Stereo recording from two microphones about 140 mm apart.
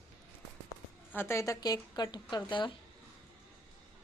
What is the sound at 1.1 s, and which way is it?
Speech, 15° left (ahead or behind).